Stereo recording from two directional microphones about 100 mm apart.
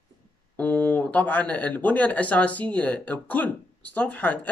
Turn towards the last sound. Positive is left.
turn(degrees=15)  # may be behind; listen again after turning